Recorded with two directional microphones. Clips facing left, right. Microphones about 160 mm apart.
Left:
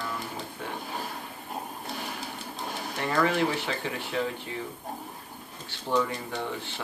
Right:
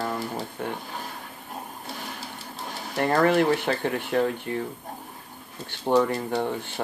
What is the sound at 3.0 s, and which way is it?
Speech, 45° right (ahead or behind).